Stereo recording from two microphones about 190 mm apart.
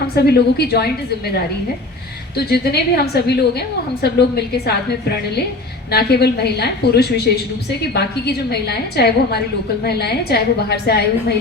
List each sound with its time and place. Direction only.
0.3 s a woman's voice: 55° left (ahead or behind)
2.3 s a woman's voice: 55° left (ahead or behind)